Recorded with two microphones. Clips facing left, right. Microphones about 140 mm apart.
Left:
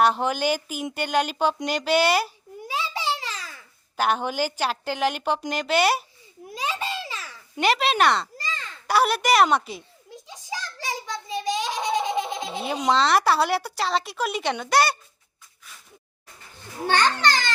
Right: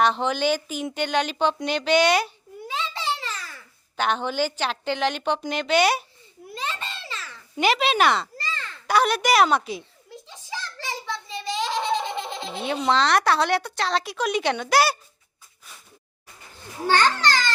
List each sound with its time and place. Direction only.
0.0 s a woman's voice: 10° left (ahead or behind)
1.6 s babbling: 5° left (ahead or behind)
3.9 s a woman's voice: 10° left (ahead or behind)
6.5 s babbling: 10° left (ahead or behind)
7.6 s speech: centre (ahead or behind)
8.4 s a sound: 15° left (ahead or behind)
8.9 s speech: 5° left (ahead or behind)
10.2 s a sound: 15° left (ahead or behind)
12.9 s speech: centre (ahead or behind)
16.8 s a woman's voice: 15° left (ahead or behind)